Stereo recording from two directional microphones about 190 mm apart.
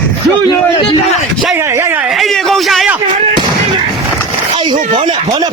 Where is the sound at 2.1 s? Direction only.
Centre (ahead or behind).